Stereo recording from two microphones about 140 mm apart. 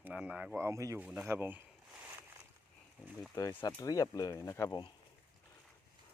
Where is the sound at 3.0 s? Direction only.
5° right (ahead or behind).